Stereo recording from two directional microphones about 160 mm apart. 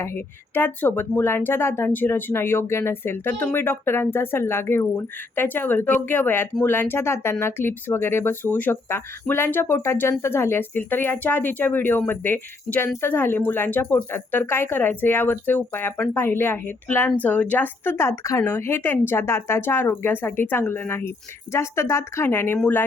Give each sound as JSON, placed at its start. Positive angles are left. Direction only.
{"t": 0.0, "sound": "speech", "side_deg": 15}